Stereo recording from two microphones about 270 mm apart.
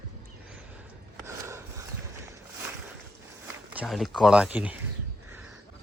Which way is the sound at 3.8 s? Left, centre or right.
Centre.